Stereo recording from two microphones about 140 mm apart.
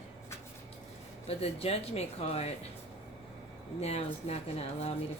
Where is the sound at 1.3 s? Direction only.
45° left (ahead or behind).